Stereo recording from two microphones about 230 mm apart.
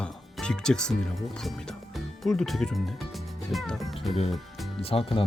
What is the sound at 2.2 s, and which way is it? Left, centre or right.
Speech, centre.